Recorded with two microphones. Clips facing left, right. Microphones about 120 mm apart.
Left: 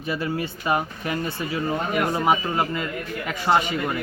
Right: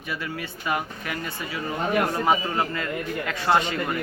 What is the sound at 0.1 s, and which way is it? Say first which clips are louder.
Speech: left 6 dB; 30° left (ahead or behind).